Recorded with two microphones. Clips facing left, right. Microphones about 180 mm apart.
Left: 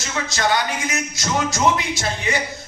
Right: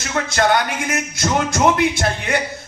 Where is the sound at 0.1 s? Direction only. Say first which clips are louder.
Right 4 dB; 55° right (ahead or behind).